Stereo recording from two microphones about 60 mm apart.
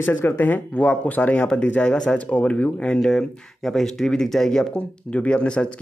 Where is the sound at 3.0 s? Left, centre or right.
Centre.